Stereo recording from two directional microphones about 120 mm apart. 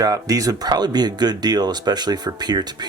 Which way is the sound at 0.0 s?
30° right (ahead or behind).